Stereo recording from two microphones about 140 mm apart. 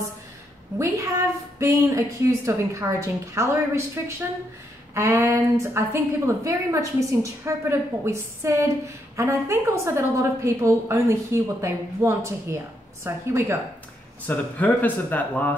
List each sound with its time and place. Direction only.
0.7 s a woman's voice: 25° right (ahead or behind)
14.2 s speech: 10° left (ahead or behind)